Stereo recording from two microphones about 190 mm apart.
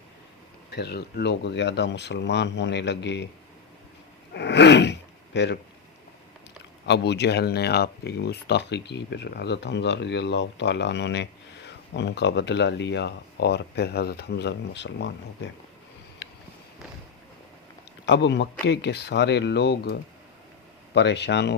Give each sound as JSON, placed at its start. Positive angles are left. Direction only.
{"t": 0.7, "sound": "speech", "side_deg": 60}
{"t": 4.4, "sound": "gasp", "side_deg": 65}
{"t": 6.8, "sound": "speech", "side_deg": 65}
{"t": 18.0, "sound": "speech", "side_deg": 65}